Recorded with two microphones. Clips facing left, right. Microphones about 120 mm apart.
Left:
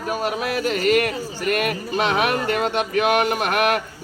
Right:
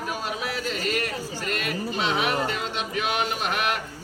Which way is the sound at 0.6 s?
60° left (ahead or behind).